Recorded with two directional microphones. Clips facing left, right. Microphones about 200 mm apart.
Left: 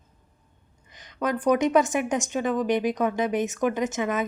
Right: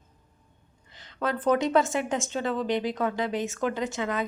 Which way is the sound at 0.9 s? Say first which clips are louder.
Left 2 dB; 15° left (ahead or behind).